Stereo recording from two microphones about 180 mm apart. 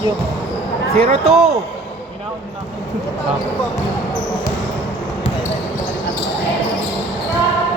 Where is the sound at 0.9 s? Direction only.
35° right (ahead or behind).